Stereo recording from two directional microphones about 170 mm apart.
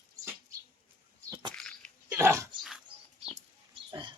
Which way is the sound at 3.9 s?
25° right (ahead or behind).